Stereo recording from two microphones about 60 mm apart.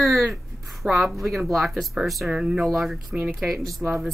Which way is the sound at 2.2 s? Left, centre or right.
Centre.